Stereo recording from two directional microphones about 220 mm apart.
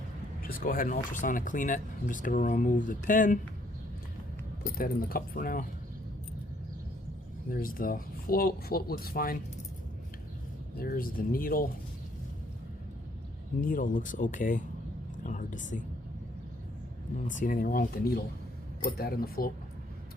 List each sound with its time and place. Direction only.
0.4 s speech: 40° left (ahead or behind)
4.8 s speech: 40° left (ahead or behind)
7.5 s speech: 40° left (ahead or behind)
10.8 s speech: 45° left (ahead or behind)
13.6 s speech: 40° left (ahead or behind)
15.2 s whispering: 35° left (ahead or behind)
17.2 s speech: 35° left (ahead or behind)